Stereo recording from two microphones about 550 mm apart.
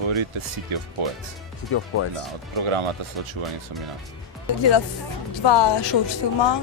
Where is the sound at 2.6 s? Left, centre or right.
Right.